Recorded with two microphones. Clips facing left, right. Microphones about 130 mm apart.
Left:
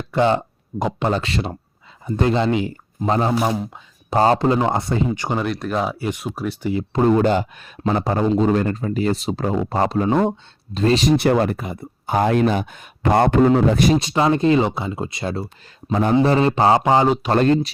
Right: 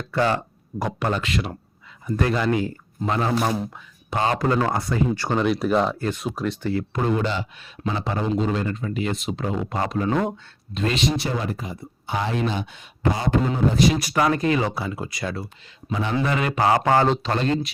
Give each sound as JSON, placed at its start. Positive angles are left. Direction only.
{"t": 0.1, "sound": "speech", "side_deg": 20}
{"t": 3.1, "sound": "speech", "side_deg": 30}
{"t": 4.4, "sound": "speech", "side_deg": 20}
{"t": 5.4, "sound": "speech", "side_deg": 0}
{"t": 7.2, "sound": "speech", "side_deg": 50}
{"t": 11.2, "sound": "speech", "side_deg": 65}
{"t": 13.9, "sound": "speech", "side_deg": 25}
{"t": 15.9, "sound": "speech", "side_deg": 50}
{"t": 16.1, "sound": "speech", "side_deg": 30}
{"t": 16.8, "sound": "speech", "side_deg": 15}
{"t": 17.3, "sound": "speech", "side_deg": 45}